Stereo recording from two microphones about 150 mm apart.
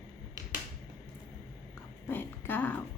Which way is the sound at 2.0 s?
15° left (ahead or behind).